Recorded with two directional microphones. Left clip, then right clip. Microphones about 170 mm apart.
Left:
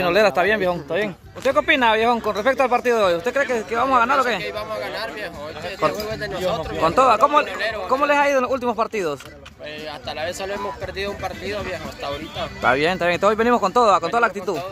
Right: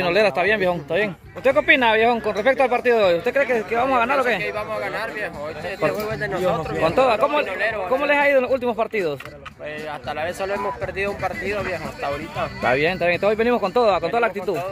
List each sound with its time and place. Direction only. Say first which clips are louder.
0.0 s speech: left 1 dB; 25° left (ahead or behind)
0.6 s speech: right 1 dB; 5° left (ahead or behind)
7.5 s speech: even; 5° left (ahead or behind)
10.2 s speech: right 2 dB; 15° left (ahead or behind)